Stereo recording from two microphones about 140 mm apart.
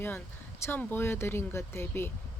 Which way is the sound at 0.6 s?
15° left (ahead or behind).